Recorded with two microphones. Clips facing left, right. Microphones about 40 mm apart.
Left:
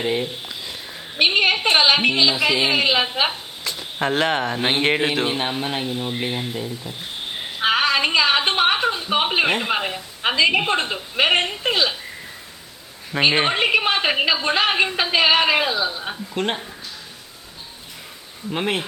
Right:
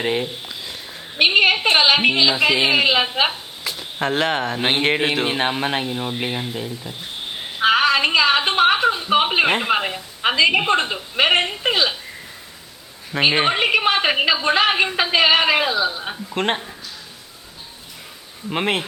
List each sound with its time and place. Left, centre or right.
0.4 s sniff: centre
1.7 s a woman's voice: centre
2.3 s a woman's voice: centre
2.6 s a woman's voice: centre
5.5 s speech: right
6.1 s speech: right
7.6 s a woman's voice: centre
13.1 s a woman's voice: centre
16.3 s speech: right
18.5 s speech: right